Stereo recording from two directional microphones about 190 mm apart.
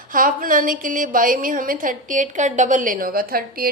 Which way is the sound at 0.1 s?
45° right (ahead or behind).